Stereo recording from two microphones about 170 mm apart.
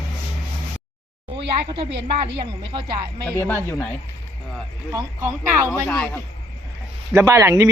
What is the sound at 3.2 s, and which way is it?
Speech, 10° left (ahead or behind).